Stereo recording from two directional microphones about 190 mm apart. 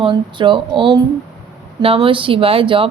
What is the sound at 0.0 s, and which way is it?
A woman's voice, 25° right (ahead or behind).